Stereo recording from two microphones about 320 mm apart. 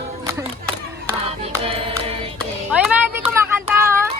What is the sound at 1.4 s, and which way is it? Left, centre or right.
Singing, centre.